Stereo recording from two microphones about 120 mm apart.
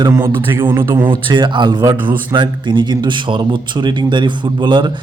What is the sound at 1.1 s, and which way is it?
A man's voice, 40° right (ahead or behind).